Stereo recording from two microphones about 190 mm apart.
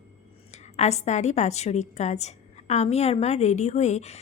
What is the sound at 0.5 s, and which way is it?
A woman's voice, 35° left (ahead or behind).